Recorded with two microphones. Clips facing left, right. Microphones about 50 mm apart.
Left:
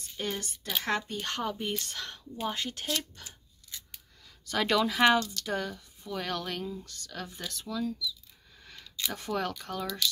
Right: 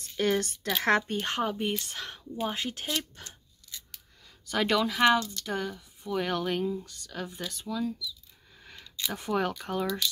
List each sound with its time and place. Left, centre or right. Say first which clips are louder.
0.2 s speech: right 8 dB; right
0.8 s speech: right 7 dB; right
1.2 s speech: right 4 dB; right
4.5 s speech: right 1 dB; centre